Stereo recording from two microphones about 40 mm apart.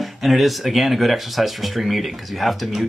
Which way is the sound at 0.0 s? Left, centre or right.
Centre.